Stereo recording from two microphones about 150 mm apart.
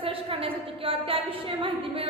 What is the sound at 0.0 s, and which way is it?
A woman's voice, 40° right (ahead or behind).